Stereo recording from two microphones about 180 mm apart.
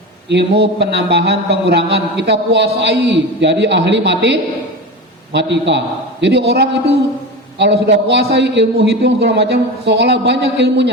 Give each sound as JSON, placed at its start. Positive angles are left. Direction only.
{"t": 0.3, "sound": "a man's voice", "side_deg": -70}